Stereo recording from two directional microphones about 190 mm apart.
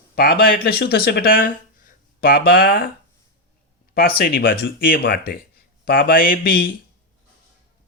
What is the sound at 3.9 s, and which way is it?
Speech, 50° left (ahead or behind).